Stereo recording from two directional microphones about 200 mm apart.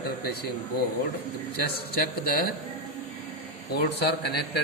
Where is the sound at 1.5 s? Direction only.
50° left (ahead or behind).